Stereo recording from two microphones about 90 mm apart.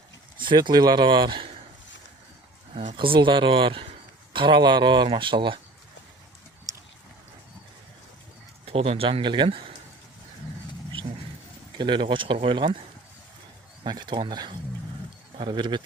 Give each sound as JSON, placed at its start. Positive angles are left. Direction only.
{"t": 0.3, "sound": "speech", "side_deg": -60}
{"t": 2.7, "sound": "speech", "side_deg": -75}
{"t": 4.3, "sound": "speech", "side_deg": -65}
{"t": 8.6, "sound": "speech", "side_deg": -90}
{"t": 11.8, "sound": "speech", "side_deg": -65}
{"t": 13.8, "sound": "speech", "side_deg": -55}